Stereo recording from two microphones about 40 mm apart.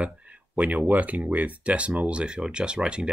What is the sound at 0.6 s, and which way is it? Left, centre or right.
Speech, right.